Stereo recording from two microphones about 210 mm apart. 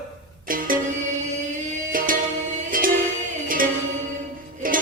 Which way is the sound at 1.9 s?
40° right (ahead or behind).